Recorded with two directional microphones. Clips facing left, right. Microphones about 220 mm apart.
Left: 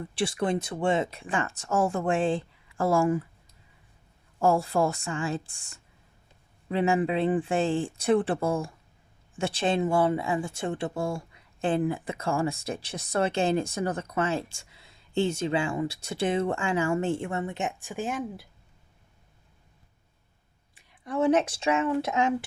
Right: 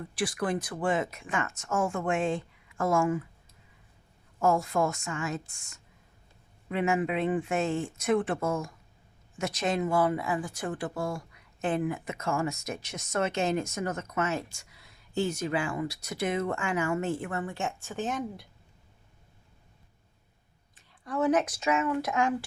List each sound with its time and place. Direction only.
0.1 s speech: 25° left (ahead or behind)
4.4 s speech: 30° left (ahead or behind); by 18.4 s 5° left (ahead or behind)
20.7 s speech: 25° left (ahead or behind)